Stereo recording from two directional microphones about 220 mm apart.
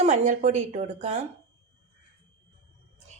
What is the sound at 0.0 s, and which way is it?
Speech, 30° right (ahead or behind).